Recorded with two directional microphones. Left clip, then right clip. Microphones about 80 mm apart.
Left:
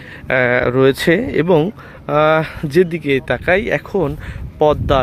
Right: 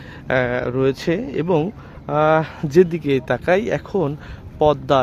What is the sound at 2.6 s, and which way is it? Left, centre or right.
Speech, centre.